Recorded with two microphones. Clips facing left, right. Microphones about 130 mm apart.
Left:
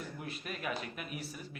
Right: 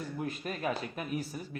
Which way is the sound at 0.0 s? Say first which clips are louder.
Right 7 dB; 40° right (ahead or behind).